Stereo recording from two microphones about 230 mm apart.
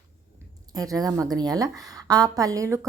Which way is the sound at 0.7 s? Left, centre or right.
Centre.